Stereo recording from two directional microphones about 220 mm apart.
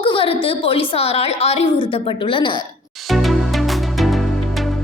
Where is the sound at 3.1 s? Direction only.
Centre (ahead or behind).